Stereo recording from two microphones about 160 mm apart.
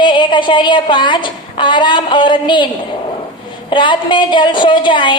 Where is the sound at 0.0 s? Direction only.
30° left (ahead or behind).